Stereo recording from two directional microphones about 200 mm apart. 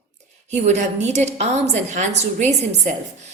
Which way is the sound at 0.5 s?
35° right (ahead or behind).